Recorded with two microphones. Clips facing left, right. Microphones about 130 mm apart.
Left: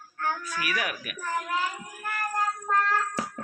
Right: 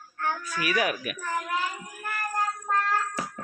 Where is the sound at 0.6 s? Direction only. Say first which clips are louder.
Right 6 dB; 25° right (ahead or behind).